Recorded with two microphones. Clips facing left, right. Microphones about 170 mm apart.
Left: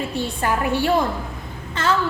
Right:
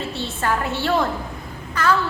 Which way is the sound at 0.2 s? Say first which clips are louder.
Left 1 dB; 15° left (ahead or behind).